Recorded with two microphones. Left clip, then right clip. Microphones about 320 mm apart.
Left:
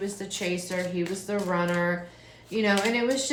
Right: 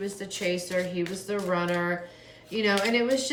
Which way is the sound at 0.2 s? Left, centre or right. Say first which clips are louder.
Right 1 dB; centre.